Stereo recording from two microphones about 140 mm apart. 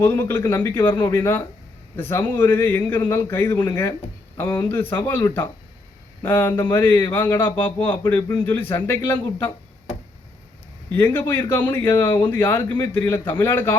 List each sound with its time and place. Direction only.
0.0 s speech: 15° left (ahead or behind)
4.7 s speech: 15° left (ahead or behind)
7.9 s speech: 25° left (ahead or behind)
10.9 s speech: 15° left (ahead or behind)